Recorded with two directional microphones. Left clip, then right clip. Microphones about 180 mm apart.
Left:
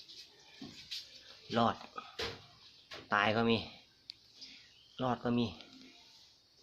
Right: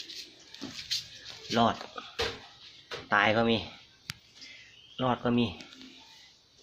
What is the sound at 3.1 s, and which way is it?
Speech, 15° left (ahead or behind).